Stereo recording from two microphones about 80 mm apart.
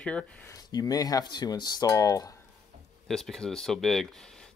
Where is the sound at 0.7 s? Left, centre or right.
Left.